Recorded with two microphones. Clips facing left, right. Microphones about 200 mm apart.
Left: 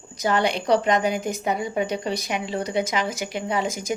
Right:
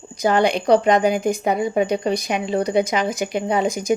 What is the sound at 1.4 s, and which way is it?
Speech, 30° right (ahead or behind).